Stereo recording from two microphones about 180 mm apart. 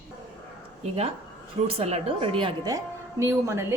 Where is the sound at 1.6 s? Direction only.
35° right (ahead or behind).